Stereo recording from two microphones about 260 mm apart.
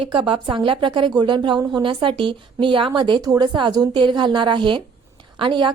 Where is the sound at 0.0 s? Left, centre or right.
Centre.